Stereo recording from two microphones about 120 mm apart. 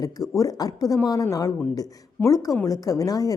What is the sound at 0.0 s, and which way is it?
A woman's voice, 30° left (ahead or behind).